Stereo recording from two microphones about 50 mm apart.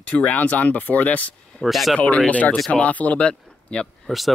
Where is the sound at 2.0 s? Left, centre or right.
Left.